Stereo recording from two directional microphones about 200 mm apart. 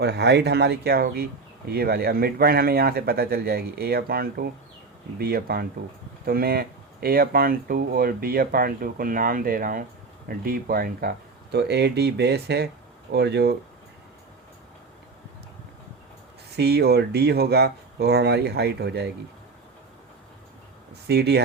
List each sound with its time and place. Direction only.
0.0 s speech: 55° right (ahead or behind)
16.6 s speech: 55° right (ahead or behind)
21.1 s speech: 55° right (ahead or behind)